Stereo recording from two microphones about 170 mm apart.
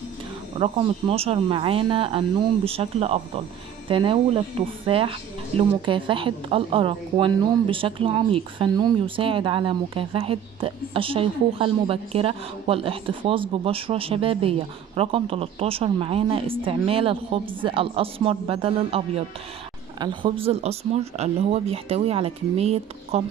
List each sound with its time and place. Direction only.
0.6 s a woman's voice: 35° right (ahead or behind)